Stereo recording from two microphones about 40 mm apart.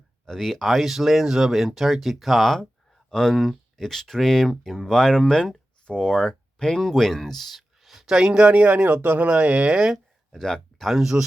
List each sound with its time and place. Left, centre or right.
0.3 s speech: centre
3.1 s speech: centre
6.8 s speech: centre
8.0 s speech: centre
10.3 s speech: centre
11.0 s speech: centre